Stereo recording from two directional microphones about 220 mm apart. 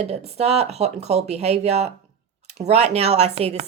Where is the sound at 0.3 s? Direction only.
30° right (ahead or behind).